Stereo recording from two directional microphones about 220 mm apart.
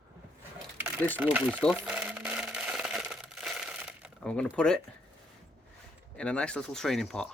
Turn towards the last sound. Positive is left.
turn(degrees=0)  # may be behind; listen again after turning